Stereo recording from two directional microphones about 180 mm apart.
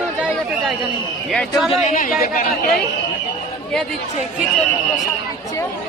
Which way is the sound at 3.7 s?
5° left (ahead or behind).